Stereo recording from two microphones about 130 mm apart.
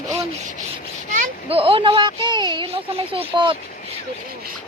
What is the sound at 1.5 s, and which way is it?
Speech, 45° right (ahead or behind).